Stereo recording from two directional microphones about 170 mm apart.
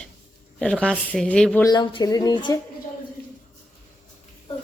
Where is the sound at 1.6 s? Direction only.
25° left (ahead or behind).